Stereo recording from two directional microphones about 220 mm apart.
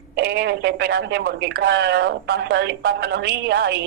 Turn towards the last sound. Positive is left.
turn(degrees=-50)  # may be behind; listen again after turning